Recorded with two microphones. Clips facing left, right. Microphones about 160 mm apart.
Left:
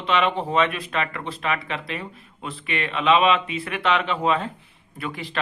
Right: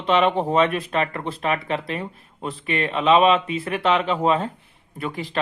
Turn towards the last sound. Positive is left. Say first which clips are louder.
# right 3 dB
turn(degrees=-40)  # may be behind; listen again after turning